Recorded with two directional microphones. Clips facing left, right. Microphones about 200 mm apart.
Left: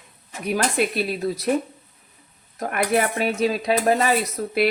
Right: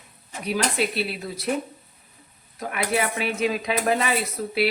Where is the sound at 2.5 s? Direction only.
50° left (ahead or behind).